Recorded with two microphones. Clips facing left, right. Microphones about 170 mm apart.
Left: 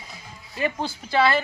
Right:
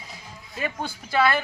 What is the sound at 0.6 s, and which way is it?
Speech, 25° left (ahead or behind).